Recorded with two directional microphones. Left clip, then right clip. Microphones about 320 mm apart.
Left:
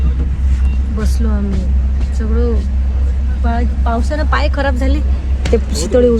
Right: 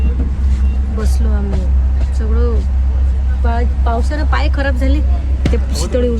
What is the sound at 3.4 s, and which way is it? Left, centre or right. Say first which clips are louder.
Speech: even; centre.